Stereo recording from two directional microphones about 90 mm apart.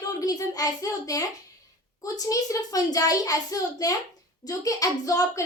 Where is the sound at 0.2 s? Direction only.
40° left (ahead or behind).